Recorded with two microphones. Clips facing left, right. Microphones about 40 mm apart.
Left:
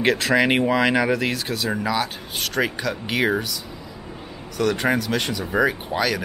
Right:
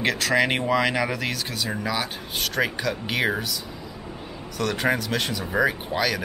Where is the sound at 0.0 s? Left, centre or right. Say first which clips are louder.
Left 3 dB; centre.